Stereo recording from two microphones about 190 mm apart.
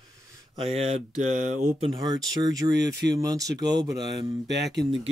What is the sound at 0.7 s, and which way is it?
Speech, 35° right (ahead or behind).